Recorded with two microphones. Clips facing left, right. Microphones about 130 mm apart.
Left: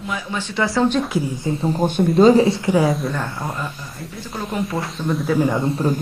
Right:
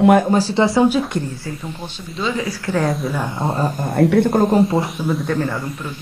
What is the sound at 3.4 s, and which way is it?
Speech, 30° right (ahead or behind).